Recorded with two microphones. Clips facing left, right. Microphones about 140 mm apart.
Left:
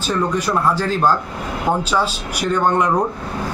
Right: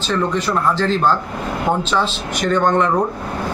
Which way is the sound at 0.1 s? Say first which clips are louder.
Even; 10° left (ahead or behind).